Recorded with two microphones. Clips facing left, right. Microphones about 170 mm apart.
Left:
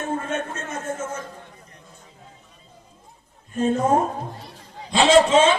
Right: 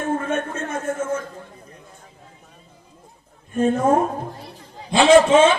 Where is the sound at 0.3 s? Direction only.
55° right (ahead or behind).